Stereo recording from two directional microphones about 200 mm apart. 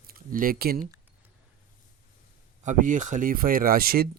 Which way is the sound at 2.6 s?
40° right (ahead or behind).